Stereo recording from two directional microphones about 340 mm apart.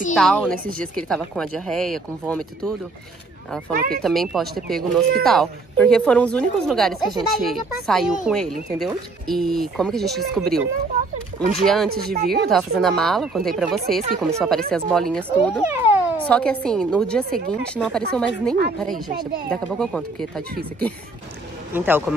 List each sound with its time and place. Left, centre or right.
0.1 s a woman's voice: centre
4.0 s a woman's voice: centre
11.9 s speech: right
12.3 s a woman's voice: centre
14.0 s speech: centre
14.7 s a woman's voice: centre
21.7 s a woman's voice: centre